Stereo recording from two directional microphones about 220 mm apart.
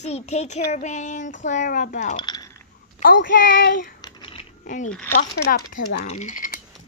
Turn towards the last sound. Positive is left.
turn(degrees=40)  # may be behind; listen again after turning